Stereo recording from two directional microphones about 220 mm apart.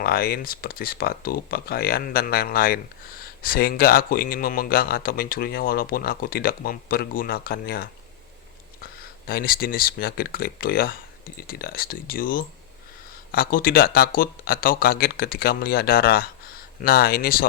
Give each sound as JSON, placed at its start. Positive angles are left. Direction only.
{"t": 0.0, "sound": "a man's voice", "side_deg": 45}